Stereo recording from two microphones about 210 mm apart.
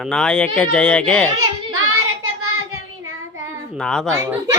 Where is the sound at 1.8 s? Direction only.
90° right.